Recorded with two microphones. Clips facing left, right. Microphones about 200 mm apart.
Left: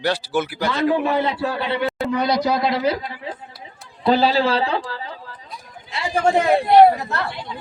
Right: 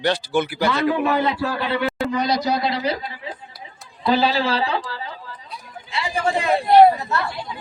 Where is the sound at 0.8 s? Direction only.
30° left (ahead or behind).